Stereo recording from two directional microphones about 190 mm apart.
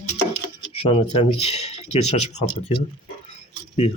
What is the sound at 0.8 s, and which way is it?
Speech, 30° left (ahead or behind).